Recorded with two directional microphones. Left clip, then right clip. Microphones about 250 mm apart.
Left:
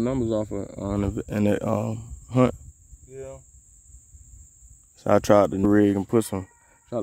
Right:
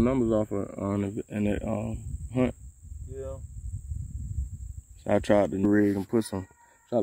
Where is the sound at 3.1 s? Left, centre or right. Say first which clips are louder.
Even; right.